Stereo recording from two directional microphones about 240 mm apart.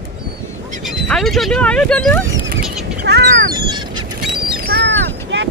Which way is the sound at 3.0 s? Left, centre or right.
Right.